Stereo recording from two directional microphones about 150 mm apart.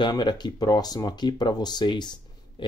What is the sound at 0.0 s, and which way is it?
Speech, 30° left (ahead or behind).